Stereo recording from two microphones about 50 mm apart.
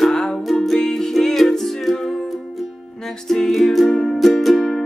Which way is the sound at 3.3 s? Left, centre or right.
Centre.